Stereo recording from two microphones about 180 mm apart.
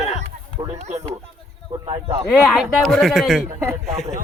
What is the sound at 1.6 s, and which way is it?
Speech, 25° right (ahead or behind).